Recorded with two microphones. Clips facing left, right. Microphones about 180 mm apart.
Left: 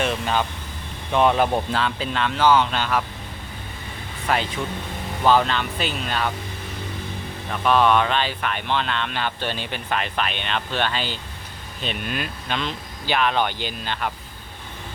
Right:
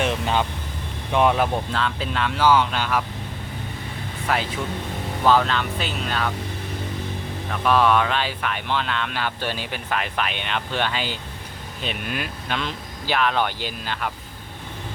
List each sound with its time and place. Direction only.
0.0 s speech: 20° right (ahead or behind)
1.1 s speech: 5° right (ahead or behind)
4.3 s speech: centre (ahead or behind)
7.5 s speech: centre (ahead or behind)